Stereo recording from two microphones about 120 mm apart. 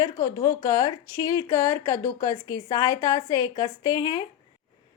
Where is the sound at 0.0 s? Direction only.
25° left (ahead or behind).